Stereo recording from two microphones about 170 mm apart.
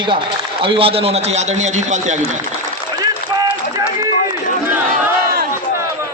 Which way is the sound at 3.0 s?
25° right (ahead or behind).